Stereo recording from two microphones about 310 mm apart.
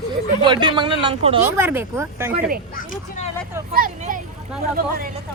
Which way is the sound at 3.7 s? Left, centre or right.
Right.